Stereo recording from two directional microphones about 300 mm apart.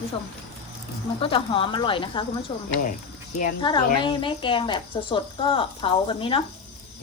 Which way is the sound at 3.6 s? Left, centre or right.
Centre.